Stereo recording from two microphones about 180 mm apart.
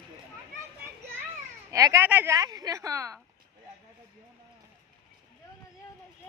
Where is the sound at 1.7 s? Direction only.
15° right (ahead or behind).